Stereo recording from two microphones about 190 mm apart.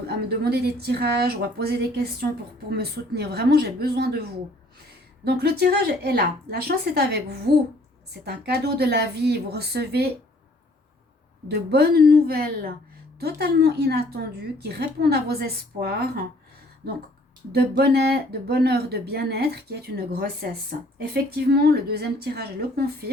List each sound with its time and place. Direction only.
0.3 s speech: 60° right (ahead or behind)
5.2 s speech: 60° right (ahead or behind)
11.4 s speech: 60° right (ahead or behind)
17.5 s speech: 55° right (ahead or behind)